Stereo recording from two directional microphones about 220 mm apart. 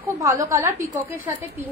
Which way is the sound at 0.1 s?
15° right (ahead or behind).